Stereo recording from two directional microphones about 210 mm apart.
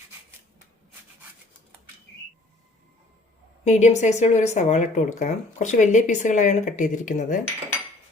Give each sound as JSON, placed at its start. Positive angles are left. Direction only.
{"t": 3.6, "sound": "speech", "side_deg": 35}